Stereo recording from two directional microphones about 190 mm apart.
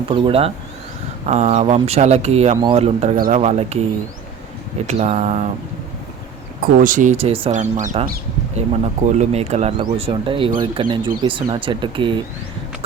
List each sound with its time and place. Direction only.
0.1 s speech: 30° right (ahead or behind)
4.9 s speech: 35° right (ahead or behind)
6.8 s speech: 45° right (ahead or behind)
8.5 s speech: 35° right (ahead or behind)